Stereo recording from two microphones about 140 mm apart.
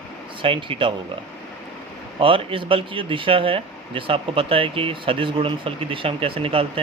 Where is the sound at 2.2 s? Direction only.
40° right (ahead or behind).